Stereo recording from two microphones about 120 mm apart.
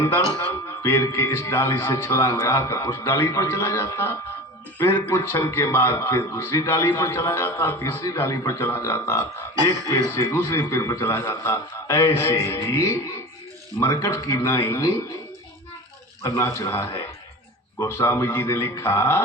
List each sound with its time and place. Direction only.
0.3 s a man's voice: 20° left (ahead or behind)
16.2 s a man's voice: 20° left (ahead or behind)